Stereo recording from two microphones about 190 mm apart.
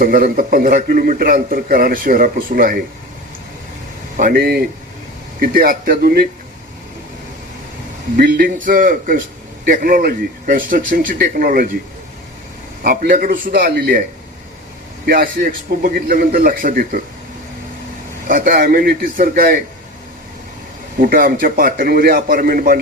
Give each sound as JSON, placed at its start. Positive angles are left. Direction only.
{"t": 0.0, "sound": "a man's voice", "side_deg": -50}
{"t": 4.2, "sound": "a man's voice", "side_deg": -50}
{"t": 8.1, "sound": "a man's voice", "side_deg": -50}
{"t": 12.8, "sound": "a man's voice", "side_deg": -50}
{"t": 15.0, "sound": "a man's voice", "side_deg": -50}
{"t": 18.3, "sound": "a man's voice", "side_deg": -45}
{"t": 21.0, "sound": "a man's voice", "side_deg": -45}